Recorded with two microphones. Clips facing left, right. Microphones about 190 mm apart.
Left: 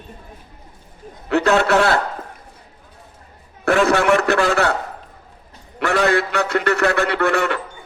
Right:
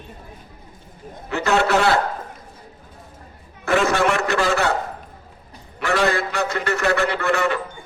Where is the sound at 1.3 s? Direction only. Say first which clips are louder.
Left 3 dB; 65° left (ahead or behind).